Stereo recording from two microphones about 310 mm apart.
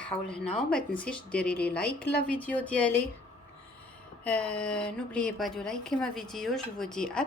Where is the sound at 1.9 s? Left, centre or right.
Left.